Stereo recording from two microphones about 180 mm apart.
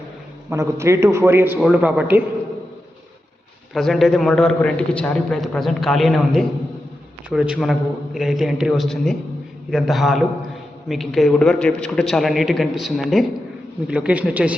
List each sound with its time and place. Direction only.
0.5 s a man's voice: 15° right (ahead or behind)
3.8 s a man's voice: centre (ahead or behind)